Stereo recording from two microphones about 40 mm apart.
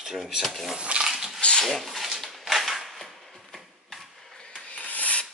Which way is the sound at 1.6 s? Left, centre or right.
Centre.